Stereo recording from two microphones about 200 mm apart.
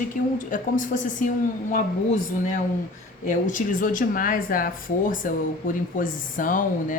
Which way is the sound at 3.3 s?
40° left (ahead or behind).